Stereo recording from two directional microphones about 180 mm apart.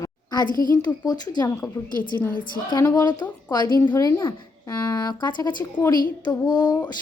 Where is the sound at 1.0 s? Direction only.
20° left (ahead or behind).